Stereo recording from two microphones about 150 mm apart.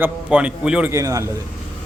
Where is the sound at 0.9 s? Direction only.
20° right (ahead or behind).